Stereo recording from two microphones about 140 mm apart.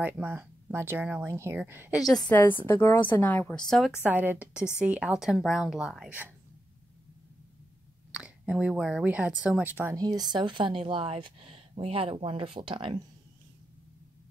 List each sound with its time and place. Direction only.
0.0 s speech: 15° right (ahead or behind)
2.1 s a woman's voice: 10° left (ahead or behind)
4.0 s speech: 10° right (ahead or behind)
8.1 s speech: 5° right (ahead or behind)
9.9 s speech: 30° right (ahead or behind)